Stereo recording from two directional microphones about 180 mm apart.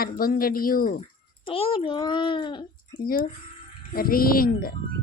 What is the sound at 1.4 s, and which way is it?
A child's voice, 30° left (ahead or behind).